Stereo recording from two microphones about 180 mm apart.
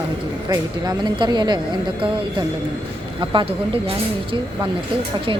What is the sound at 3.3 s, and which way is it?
Speech, 30° right (ahead or behind).